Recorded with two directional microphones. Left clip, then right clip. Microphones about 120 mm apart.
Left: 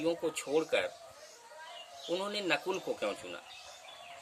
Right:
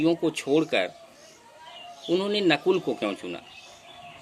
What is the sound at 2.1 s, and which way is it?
Speech, 30° left (ahead or behind).